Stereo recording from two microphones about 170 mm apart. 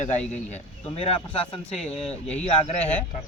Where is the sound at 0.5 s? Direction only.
35° left (ahead or behind).